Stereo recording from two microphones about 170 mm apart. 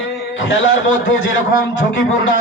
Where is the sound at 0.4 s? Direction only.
90° left.